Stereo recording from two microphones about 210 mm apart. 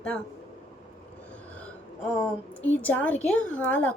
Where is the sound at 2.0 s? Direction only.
5° left (ahead or behind).